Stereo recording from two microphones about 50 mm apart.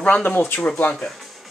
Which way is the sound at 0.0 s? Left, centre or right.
Left.